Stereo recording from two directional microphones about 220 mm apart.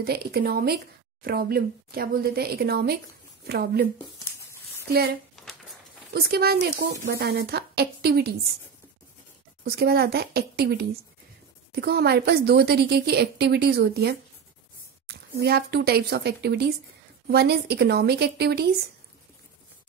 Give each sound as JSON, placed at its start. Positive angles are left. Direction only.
{"t": 0.0, "sound": "a woman's voice", "side_deg": -45}
{"t": 5.3, "sound": "a sound", "side_deg": 0}
{"t": 6.1, "sound": "a woman's voice", "side_deg": -45}
{"t": 9.7, "sound": "a woman's voice", "side_deg": -45}